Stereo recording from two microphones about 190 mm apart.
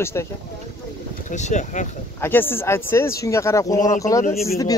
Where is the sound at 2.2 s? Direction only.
10° left (ahead or behind).